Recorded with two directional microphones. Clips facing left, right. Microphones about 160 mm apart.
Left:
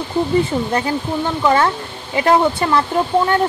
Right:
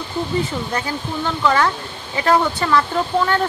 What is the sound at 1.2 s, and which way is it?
Speech, 20° left (ahead or behind).